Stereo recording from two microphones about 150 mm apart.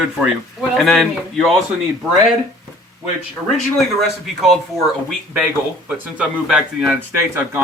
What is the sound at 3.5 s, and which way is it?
Speech, centre (ahead or behind).